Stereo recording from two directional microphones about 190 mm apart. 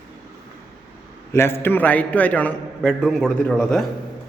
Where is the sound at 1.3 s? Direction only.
15° left (ahead or behind).